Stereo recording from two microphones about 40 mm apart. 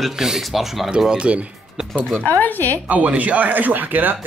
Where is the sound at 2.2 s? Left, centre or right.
Left.